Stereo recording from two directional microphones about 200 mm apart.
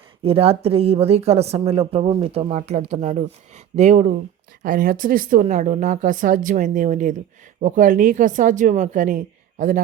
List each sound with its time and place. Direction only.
0.3 s speech: 30° right (ahead or behind)